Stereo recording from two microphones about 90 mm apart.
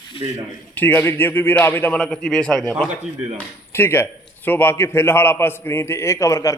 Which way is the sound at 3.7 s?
25° left (ahead or behind).